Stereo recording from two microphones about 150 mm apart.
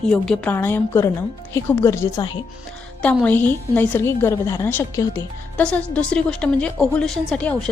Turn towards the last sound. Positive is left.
turn(degrees=5)  # may be behind; listen again after turning